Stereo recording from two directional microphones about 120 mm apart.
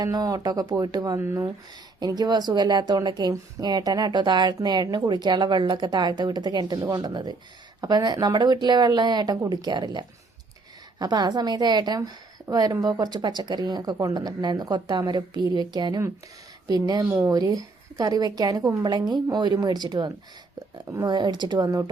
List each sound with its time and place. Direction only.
0.0 s a woman's voice: 30° right (ahead or behind)
2.0 s a woman's voice: 35° right (ahead or behind)
17.1 s speech: 15° right (ahead or behind)
17.3 s a woman's voice: 30° right (ahead or behind)